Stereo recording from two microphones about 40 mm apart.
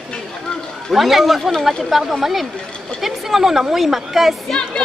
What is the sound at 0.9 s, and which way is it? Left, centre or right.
Speech, centre.